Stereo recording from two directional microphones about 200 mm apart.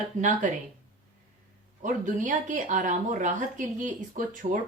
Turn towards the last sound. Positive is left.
turn(degrees=-40)  # may be behind; listen again after turning